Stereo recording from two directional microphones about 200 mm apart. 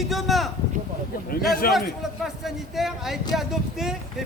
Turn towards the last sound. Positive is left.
turn(degrees=0)  # may be behind; listen again after turning